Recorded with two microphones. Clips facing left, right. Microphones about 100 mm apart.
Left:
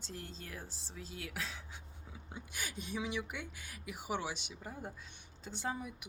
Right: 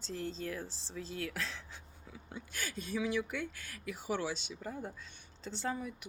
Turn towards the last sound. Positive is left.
turn(degrees=15)  # may be behind; listen again after turning